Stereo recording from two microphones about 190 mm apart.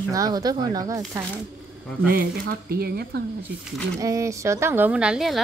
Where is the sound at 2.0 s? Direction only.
50° right (ahead or behind).